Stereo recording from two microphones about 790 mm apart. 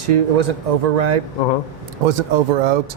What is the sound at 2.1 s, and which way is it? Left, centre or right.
Speech, right.